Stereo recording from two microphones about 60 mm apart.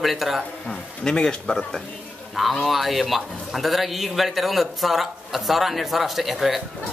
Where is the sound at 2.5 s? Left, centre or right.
Centre.